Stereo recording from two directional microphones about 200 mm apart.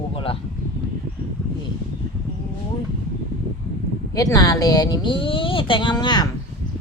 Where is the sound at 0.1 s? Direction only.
25° left (ahead or behind).